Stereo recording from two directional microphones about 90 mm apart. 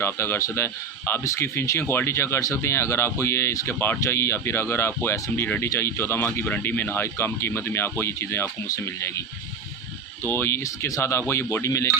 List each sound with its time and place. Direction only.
0.0 s speech: 25° left (ahead or behind)
10.2 s speech: 25° left (ahead or behind)